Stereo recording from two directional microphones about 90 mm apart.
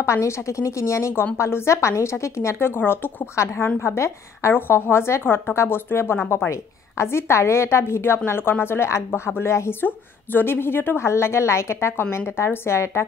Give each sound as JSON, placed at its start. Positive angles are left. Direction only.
{"t": 0.0, "sound": "a woman's voice", "side_deg": 30}